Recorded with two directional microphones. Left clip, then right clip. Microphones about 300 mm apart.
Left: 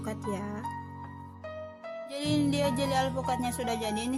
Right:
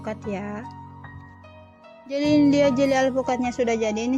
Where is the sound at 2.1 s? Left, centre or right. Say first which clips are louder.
Right 11 dB; left.